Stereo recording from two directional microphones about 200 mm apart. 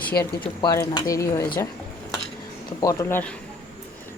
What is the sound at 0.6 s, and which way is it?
Speech, 20° left (ahead or behind).